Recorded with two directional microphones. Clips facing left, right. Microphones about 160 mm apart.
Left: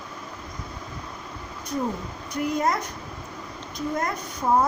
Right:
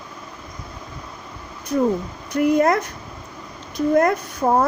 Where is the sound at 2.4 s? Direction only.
65° right (ahead or behind).